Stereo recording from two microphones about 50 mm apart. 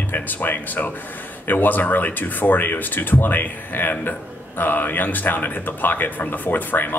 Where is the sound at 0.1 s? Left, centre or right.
Left.